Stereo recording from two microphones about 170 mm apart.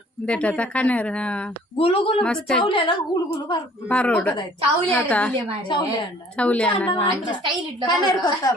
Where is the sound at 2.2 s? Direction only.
5° left (ahead or behind).